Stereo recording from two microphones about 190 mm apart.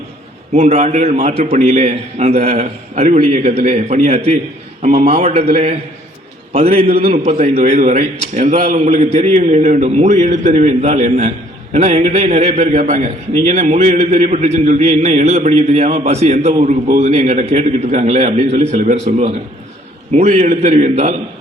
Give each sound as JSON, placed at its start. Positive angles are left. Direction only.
{"t": 0.5, "sound": "a man's voice", "side_deg": -35}
{"t": 6.5, "sound": "a man's voice", "side_deg": -35}